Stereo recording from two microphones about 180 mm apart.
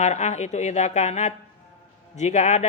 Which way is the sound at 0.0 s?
40° left (ahead or behind).